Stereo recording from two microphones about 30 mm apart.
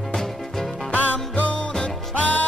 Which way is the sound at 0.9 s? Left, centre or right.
Left.